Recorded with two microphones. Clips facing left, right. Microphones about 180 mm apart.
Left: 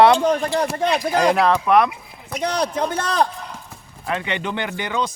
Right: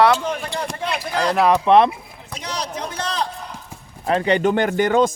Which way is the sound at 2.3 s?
55° left (ahead or behind).